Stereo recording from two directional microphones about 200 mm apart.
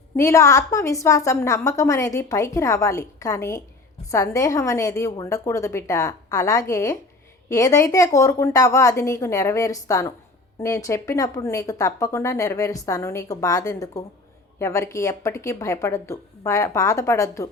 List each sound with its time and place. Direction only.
0.2 s a woman's voice: 15° left (ahead or behind)